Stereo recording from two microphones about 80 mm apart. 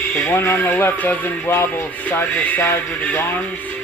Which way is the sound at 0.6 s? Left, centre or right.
Left.